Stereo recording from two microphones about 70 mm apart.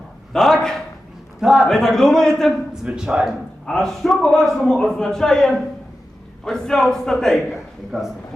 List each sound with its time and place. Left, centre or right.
0.3 s a man's voice: centre
1.4 s a man's voice: centre
2.8 s speech: centre
3.7 s a man's voice: centre